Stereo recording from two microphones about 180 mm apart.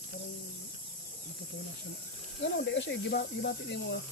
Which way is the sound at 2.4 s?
75° left (ahead or behind).